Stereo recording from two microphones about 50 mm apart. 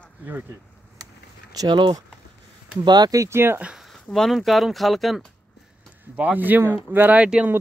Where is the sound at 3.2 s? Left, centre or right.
Right.